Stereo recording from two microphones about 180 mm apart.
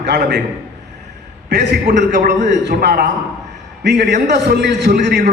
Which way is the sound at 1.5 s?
75° right (ahead or behind).